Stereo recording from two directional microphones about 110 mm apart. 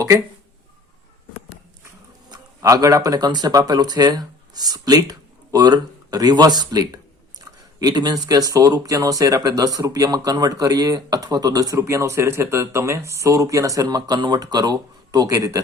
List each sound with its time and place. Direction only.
2.3 s speech: 30° right (ahead or behind)